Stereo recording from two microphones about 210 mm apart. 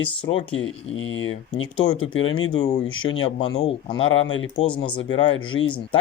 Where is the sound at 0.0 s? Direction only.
25° left (ahead or behind).